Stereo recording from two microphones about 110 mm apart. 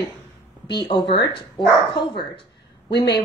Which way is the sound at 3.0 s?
40° left (ahead or behind).